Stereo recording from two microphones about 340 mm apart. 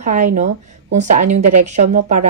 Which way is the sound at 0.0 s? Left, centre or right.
Right.